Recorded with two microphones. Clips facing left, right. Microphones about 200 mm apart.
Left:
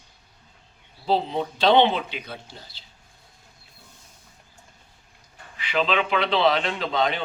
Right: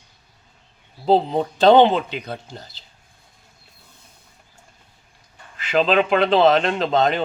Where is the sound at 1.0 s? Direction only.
45° right (ahead or behind).